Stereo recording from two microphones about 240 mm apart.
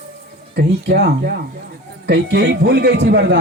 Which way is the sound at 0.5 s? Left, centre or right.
Right.